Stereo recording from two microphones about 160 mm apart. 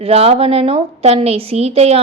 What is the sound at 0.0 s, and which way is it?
A woman's voice, 40° right (ahead or behind).